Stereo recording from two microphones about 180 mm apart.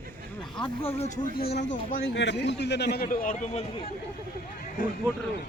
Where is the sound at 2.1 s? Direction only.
80° left.